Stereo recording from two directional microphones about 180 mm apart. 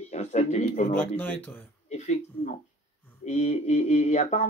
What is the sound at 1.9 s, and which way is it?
Speech, 40° left (ahead or behind).